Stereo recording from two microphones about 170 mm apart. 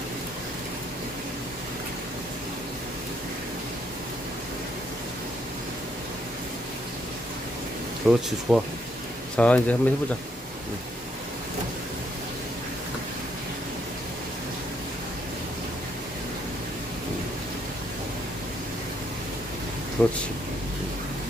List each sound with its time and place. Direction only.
8.1 s speech: centre (ahead or behind)
20.0 s speech: 5° left (ahead or behind)